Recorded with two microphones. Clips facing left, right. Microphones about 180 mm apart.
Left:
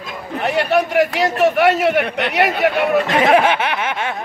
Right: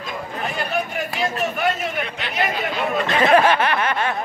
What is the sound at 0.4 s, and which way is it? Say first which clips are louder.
A man's voice: left 9 dB; 70° left (ahead or behind).